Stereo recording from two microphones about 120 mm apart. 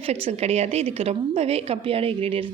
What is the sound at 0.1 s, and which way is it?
A woman's voice, 60° right (ahead or behind).